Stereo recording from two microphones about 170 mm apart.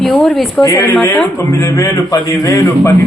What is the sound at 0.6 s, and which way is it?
A man's voice, 20° left (ahead or behind).